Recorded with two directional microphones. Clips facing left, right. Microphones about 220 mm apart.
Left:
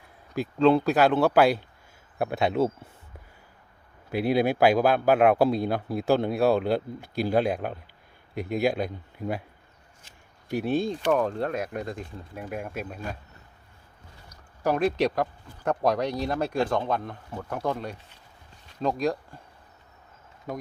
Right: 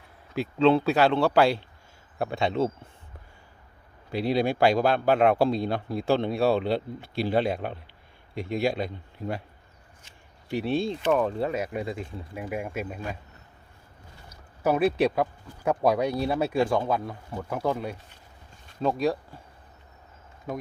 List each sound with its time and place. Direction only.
0.3 s speech: centre (ahead or behind)
4.1 s speech: 5° left (ahead or behind)
10.0 s a sound: 35° left (ahead or behind)
10.6 s speech: centre (ahead or behind)
14.6 s speech: 5° right (ahead or behind)